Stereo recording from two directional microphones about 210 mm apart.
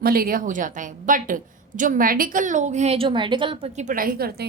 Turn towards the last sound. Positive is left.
turn(degrees=-45)  # may be behind; listen again after turning